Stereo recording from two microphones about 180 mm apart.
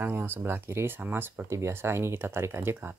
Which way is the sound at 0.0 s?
10° right (ahead or behind).